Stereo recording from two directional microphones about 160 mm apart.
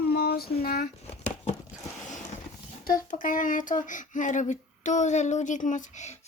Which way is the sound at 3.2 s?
55° left (ahead or behind).